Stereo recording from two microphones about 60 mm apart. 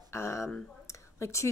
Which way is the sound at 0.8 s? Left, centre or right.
Left.